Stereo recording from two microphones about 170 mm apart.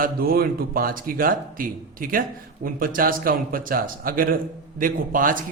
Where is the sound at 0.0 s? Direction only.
60° right (ahead or behind).